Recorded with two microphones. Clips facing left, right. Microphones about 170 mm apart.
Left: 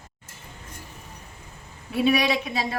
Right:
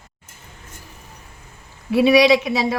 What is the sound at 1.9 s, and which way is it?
Speech, 90° right.